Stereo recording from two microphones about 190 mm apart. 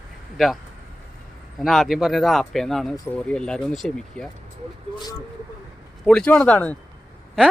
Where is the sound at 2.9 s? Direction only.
20° left (ahead or behind).